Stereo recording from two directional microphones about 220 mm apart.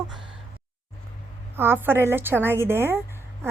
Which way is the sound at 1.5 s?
10° right (ahead or behind).